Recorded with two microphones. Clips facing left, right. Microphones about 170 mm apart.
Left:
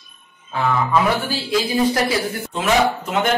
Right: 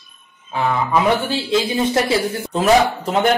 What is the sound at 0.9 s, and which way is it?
A man's voice, 25° right (ahead or behind).